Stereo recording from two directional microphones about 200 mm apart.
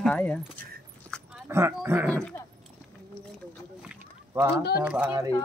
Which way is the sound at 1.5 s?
15° right (ahead or behind).